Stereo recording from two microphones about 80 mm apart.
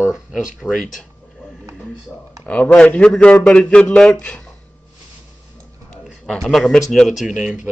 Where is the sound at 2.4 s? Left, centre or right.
Centre.